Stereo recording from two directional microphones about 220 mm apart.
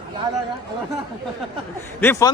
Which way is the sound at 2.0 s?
10° left (ahead or behind).